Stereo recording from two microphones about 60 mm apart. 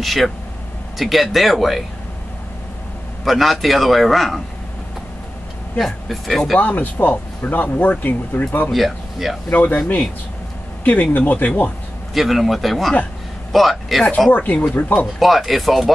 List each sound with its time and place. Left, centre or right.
0.0 s a man's voice: centre
3.3 s a man's voice: centre
5.8 s a man's voice: centre
6.6 s speech: left
8.7 s speech: centre
9.5 s speech: left
10.8 s speech: left
12.1 s a man's voice: centre
14.3 s speech: left
15.1 s a man's voice: centre